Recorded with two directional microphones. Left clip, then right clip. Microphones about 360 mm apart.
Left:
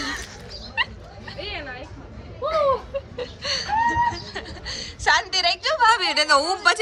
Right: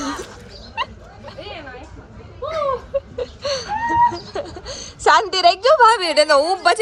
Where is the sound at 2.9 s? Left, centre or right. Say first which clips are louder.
Right 6 dB; centre.